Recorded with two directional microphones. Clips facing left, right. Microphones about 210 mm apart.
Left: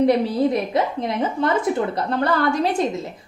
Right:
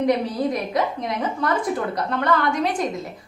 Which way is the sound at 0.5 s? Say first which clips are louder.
Left 2 dB; 30° left (ahead or behind).